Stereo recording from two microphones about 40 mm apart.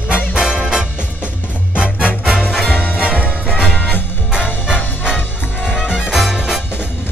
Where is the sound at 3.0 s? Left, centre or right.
Right.